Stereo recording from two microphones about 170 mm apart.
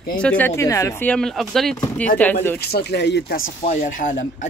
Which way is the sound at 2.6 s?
70° left (ahead or behind).